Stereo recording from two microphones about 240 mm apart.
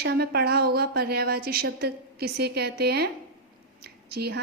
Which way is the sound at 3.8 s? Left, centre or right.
Right.